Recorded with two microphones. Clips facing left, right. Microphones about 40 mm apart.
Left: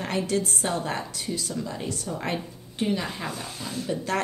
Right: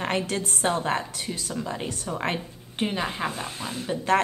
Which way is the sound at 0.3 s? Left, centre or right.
Right.